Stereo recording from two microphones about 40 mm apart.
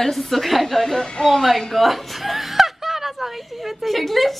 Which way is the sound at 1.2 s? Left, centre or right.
Centre.